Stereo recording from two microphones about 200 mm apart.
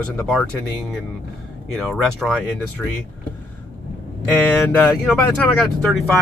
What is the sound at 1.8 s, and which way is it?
Speech, centre (ahead or behind).